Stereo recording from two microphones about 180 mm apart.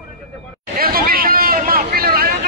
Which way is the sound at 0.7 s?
55° right (ahead or behind).